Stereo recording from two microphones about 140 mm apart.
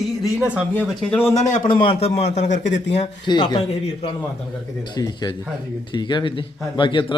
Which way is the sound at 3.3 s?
30° left (ahead or behind).